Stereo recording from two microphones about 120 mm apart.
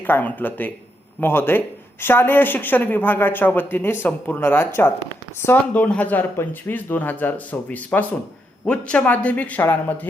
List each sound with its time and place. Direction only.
0.0 s speech: 15° left (ahead or behind)